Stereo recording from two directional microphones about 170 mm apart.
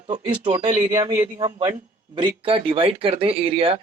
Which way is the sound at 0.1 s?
30° right (ahead or behind).